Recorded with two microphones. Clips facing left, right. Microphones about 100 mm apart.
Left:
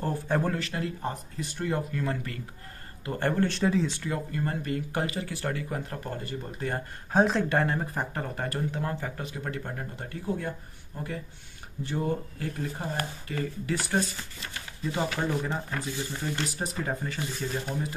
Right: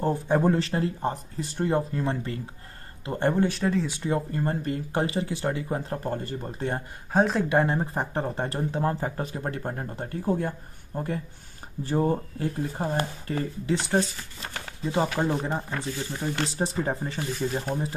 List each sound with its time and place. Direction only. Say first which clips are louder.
0.0 s speech: right 5 dB; 20° right (ahead or behind)
0.6 s speech: right 6 dB; 30° right (ahead or behind)
3.4 s speech: even; centre (ahead or behind)
3.9 s speech: right 5 dB; 25° right (ahead or behind)
7.1 s speech: right 1 dB; centre (ahead or behind)
7.4 s speech: right 3 dB; 20° right (ahead or behind); by 10.5 s 35° right (ahead or behind)
11.8 s speech: right 5 dB; 35° right (ahead or behind)